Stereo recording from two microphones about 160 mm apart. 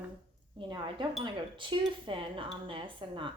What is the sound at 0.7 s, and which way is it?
Speech, 30° right (ahead or behind).